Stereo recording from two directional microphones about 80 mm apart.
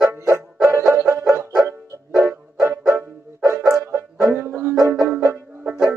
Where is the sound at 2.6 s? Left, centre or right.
Right.